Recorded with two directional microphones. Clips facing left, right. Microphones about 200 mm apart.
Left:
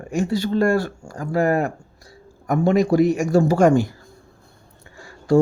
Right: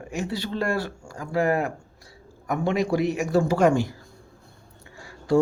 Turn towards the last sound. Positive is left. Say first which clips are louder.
# left 4 dB
turn(degrees=45)  # may be behind; listen again after turning